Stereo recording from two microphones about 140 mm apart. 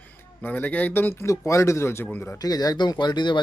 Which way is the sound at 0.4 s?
10° left (ahead or behind).